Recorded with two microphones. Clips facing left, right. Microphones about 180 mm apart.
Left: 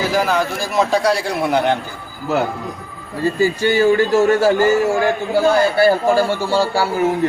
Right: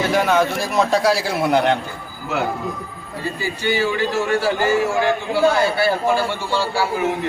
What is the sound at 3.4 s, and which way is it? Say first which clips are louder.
A man's voice: left 7 dB; 45° left (ahead or behind).